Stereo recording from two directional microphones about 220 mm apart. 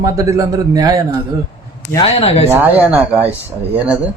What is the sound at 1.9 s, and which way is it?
Speech, 25° left (ahead or behind).